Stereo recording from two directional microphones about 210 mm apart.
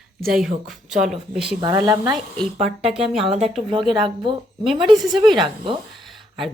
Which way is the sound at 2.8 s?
Centre (ahead or behind).